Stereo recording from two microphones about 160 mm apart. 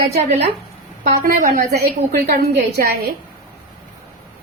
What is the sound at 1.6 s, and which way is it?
A woman's voice, 85° right.